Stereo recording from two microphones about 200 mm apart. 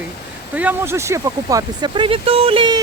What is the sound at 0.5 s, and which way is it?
Speech, 10° right (ahead or behind).